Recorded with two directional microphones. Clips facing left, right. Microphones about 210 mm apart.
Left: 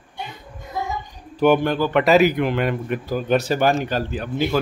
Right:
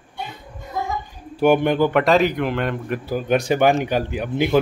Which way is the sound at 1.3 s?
15° right (ahead or behind).